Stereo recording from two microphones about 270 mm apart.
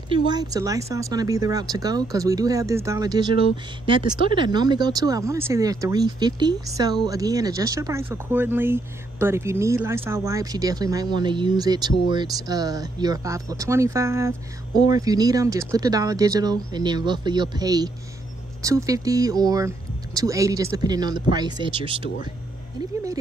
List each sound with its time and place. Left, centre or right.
0.1 s speech: centre